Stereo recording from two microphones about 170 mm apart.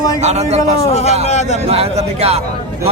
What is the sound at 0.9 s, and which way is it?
Speech, 40° left (ahead or behind).